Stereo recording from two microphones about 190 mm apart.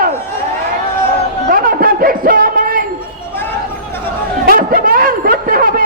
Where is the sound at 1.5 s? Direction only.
50° right (ahead or behind).